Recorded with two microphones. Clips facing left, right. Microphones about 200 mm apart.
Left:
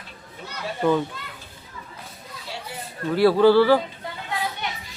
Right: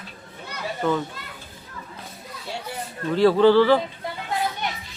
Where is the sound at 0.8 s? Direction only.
10° left (ahead or behind).